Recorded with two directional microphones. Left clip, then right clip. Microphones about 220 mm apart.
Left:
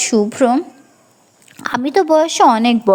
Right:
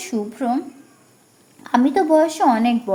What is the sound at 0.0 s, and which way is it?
Speech, 35° left (ahead or behind).